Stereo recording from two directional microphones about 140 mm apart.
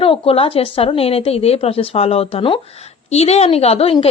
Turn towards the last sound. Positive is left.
turn(degrees=45)  # may be behind; listen again after turning